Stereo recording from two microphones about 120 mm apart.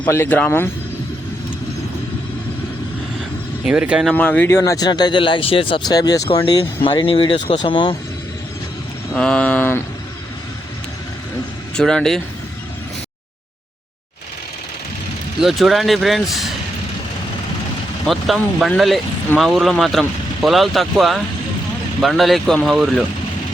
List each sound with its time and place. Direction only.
0.0 s speech: 20° left (ahead or behind)
3.7 s speech: 5° right (ahead or behind)
4.1 s speech: 15° left (ahead or behind)
4.9 s speech: 40° left (ahead or behind)
6.8 s speech: 45° left (ahead or behind)
9.1 s speech: 5° left (ahead or behind)
11.8 s speech: 5° left (ahead or behind)
15.4 s speech: centre (ahead or behind)
18.0 s speech: centre (ahead or behind)
19.4 s speech: centre (ahead or behind)